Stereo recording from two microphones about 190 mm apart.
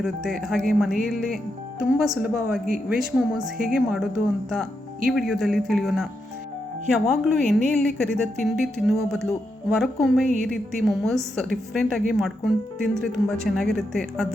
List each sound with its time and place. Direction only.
0.0 s speech: centre (ahead or behind)
7.1 s speech: centre (ahead or behind)